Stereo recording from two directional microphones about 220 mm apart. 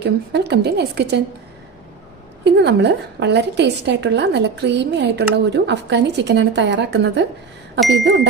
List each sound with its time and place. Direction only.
0.0 s a woman's voice: 50° right (ahead or behind)
2.4 s a woman's voice: 50° right (ahead or behind)